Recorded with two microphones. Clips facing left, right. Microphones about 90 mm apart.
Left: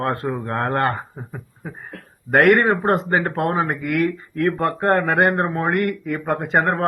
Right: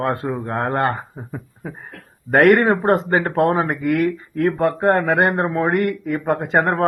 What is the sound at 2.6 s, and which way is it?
Speech, 40° right (ahead or behind).